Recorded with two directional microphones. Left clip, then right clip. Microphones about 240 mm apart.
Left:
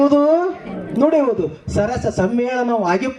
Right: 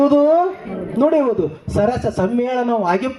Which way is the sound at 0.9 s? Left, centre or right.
Left.